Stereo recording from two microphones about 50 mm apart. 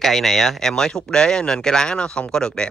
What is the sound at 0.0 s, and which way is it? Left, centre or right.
Speech, centre.